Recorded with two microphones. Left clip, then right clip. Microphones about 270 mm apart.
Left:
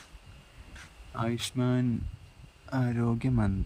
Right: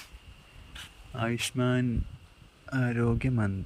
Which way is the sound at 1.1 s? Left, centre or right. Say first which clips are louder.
Right 2 dB; centre.